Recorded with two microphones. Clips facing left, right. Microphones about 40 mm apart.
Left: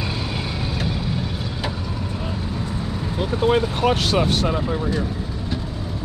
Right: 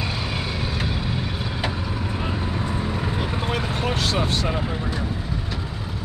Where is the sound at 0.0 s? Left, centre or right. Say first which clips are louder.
Left 1 dB; centre; by 3.4 s right.